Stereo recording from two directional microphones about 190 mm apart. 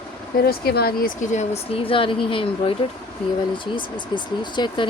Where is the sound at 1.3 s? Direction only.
30° left (ahead or behind).